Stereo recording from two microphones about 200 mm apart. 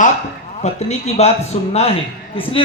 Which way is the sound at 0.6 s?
35° left (ahead or behind).